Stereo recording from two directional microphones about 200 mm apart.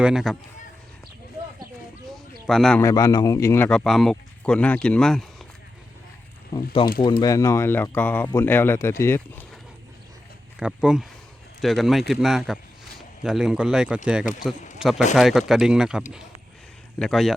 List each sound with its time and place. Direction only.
0.0 s speech: centre (ahead or behind)
2.0 s a sound: centre (ahead or behind)
2.8 s speech: 20° left (ahead or behind); by 5.2 s 5° left (ahead or behind)
7.0 s speech: 20° left (ahead or behind)
10.6 s speech: 5° right (ahead or behind)